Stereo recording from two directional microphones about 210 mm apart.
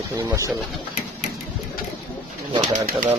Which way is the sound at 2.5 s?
40° right (ahead or behind).